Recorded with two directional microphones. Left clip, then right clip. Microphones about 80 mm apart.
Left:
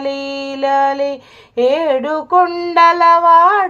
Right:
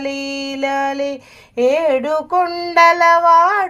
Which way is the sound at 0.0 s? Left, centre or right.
Left.